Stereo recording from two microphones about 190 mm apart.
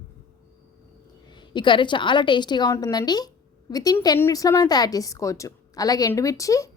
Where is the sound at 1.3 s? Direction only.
25° left (ahead or behind).